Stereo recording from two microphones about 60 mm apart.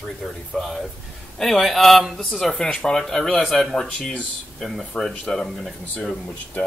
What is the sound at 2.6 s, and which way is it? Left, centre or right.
A man's voice, centre.